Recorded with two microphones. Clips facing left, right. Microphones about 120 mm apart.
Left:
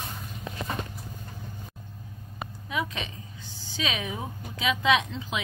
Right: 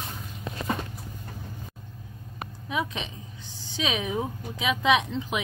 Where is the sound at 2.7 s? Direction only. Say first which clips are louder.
Right 2 dB; 20° right (ahead or behind).